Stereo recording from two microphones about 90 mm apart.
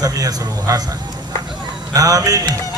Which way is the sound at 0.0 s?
40° right (ahead or behind).